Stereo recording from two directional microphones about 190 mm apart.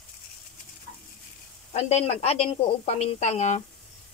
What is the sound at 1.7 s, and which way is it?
Speech, 35° left (ahead or behind).